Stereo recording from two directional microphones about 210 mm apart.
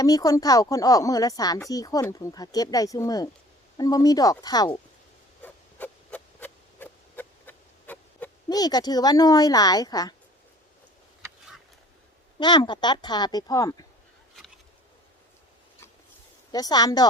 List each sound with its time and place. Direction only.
0.0 s speech: 15° left (ahead or behind)
5.4 s a sound: 5° left (ahead or behind)
12.4 s speech: 20° left (ahead or behind)
16.5 s speech: 20° left (ahead or behind)